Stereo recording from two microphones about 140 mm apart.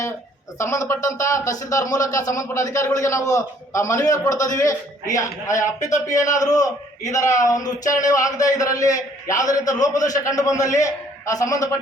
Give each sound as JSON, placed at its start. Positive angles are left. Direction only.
{"t": 0.6, "sound": "speech", "side_deg": 20}